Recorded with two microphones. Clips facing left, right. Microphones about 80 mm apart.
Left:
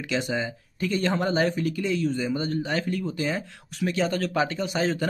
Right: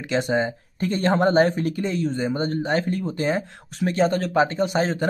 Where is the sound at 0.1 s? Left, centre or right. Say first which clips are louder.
Right 6 dB; right.